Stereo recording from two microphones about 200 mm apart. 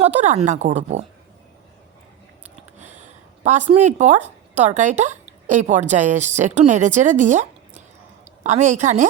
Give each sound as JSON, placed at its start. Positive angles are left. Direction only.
{"t": 0.0, "sound": "a woman's voice", "side_deg": -35}
{"t": 2.7, "sound": "a sound", "side_deg": -35}
{"t": 4.5, "sound": "a woman's voice", "side_deg": -35}